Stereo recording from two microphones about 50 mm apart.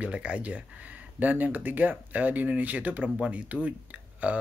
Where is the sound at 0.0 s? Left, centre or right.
Right.